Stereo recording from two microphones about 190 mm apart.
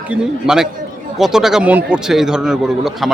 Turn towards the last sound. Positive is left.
turn(degrees=0)  # may be behind; listen again after turning